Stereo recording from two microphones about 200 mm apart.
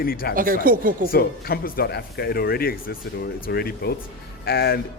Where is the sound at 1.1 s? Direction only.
50° left (ahead or behind).